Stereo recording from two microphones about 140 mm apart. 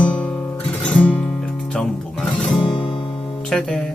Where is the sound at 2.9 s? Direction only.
35° left (ahead or behind).